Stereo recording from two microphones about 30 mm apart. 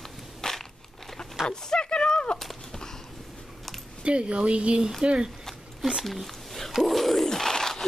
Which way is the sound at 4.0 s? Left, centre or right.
Right.